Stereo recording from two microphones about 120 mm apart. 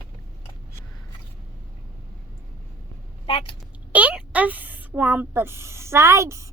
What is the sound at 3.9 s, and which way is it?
Speech, 10° right (ahead or behind).